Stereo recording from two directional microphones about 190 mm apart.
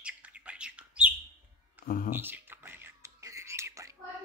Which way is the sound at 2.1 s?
10° right (ahead or behind).